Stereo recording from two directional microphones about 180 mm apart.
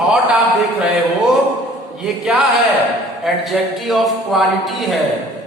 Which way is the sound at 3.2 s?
Centre (ahead or behind).